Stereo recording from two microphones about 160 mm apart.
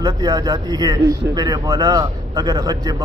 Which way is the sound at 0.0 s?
25° right (ahead or behind).